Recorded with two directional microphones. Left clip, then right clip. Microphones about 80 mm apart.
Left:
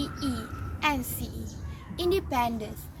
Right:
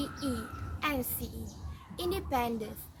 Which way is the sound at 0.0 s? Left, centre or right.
Right.